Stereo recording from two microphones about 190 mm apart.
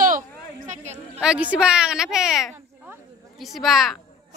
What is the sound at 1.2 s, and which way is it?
A woman's voice, 5° right (ahead or behind).